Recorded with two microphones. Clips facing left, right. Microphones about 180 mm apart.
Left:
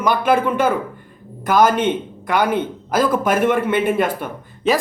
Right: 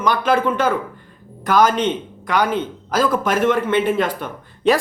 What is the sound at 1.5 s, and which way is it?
Speech, 50° left (ahead or behind).